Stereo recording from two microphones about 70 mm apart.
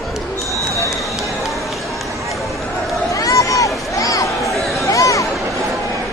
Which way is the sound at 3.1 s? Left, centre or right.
Left.